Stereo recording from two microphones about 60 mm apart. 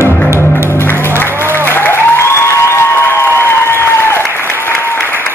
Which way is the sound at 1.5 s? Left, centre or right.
Left.